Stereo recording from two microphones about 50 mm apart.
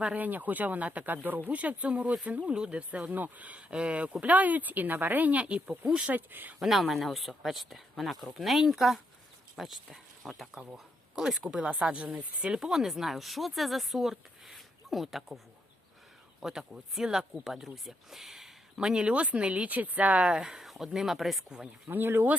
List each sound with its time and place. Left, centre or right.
0.2 s speech: right
1.5 s speech: right
3.1 s speech: right
6.1 s speech: right
6.6 s speech: centre
11.1 s speech: centre
16.4 s speech: centre
18.8 s speech: centre
20.3 s speech: centre
21.8 s speech: right